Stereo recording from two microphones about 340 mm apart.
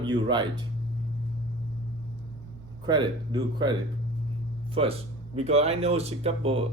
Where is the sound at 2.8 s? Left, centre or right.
Centre.